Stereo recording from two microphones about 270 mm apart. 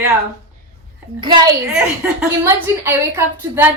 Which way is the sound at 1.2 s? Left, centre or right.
Centre.